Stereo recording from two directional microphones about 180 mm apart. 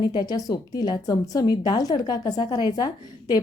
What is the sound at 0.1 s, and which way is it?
A woman's voice, 20° left (ahead or behind).